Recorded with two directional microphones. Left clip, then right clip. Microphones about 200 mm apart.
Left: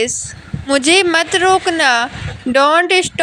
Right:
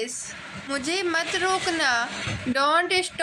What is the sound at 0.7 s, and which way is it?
A woman's voice, 40° left (ahead or behind).